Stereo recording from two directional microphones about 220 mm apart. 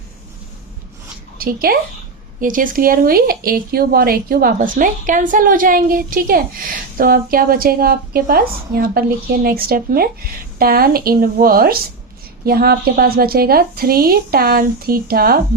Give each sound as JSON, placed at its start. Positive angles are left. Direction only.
{"t": 1.4, "sound": "a woman's voice", "side_deg": -40}